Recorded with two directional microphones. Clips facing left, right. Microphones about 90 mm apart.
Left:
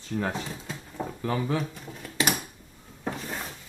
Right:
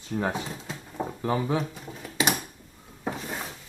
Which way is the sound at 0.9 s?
25° right (ahead or behind).